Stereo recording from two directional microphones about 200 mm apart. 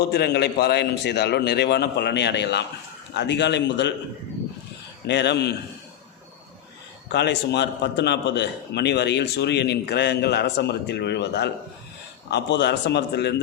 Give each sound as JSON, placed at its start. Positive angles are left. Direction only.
{"t": 0.1, "sound": "a man's voice", "side_deg": 55}
{"t": 5.0, "sound": "a man's voice", "side_deg": 60}
{"t": 7.1, "sound": "a man's voice", "side_deg": 60}